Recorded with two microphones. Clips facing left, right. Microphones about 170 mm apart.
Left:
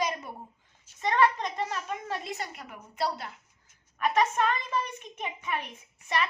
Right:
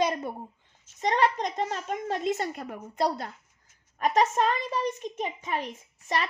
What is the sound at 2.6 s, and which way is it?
A child's voice, 40° right (ahead or behind).